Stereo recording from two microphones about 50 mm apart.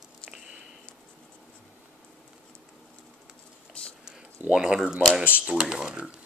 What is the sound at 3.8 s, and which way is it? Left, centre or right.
Whispering, left.